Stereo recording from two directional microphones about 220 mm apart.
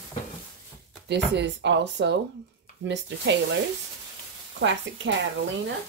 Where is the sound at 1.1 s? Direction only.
55° right (ahead or behind).